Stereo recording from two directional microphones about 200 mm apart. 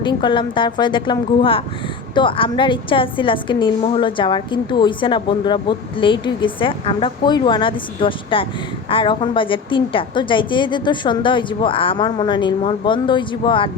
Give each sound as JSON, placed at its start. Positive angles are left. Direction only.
{"t": 0.0, "sound": "a woman's voice", "side_deg": 25}